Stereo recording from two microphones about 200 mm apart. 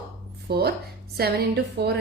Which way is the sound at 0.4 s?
55° right (ahead or behind).